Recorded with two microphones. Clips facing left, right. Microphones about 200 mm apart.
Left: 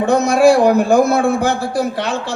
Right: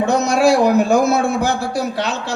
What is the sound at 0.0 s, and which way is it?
A man's voice, 55° left (ahead or behind).